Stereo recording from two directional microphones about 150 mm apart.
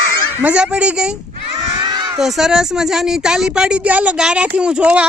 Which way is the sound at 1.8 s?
30° right (ahead or behind).